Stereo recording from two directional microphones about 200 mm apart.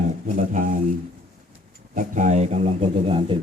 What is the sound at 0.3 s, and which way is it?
Speech, 40° right (ahead or behind).